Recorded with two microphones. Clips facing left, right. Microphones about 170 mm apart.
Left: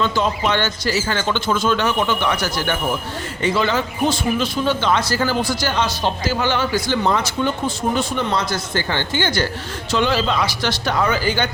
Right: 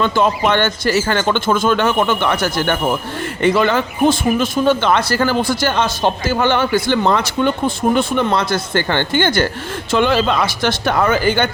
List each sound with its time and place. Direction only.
0.0 s a man's voice: 55° right (ahead or behind)